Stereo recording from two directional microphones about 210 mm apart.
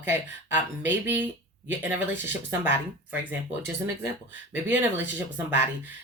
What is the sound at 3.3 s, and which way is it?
Speech, 10° right (ahead or behind).